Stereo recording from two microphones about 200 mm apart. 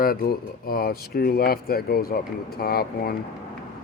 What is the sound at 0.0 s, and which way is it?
Speech, 50° left (ahead or behind).